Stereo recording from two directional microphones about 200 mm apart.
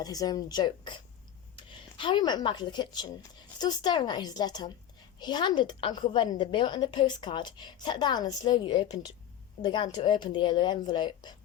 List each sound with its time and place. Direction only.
0.0 s a woman's voice: 20° left (ahead or behind)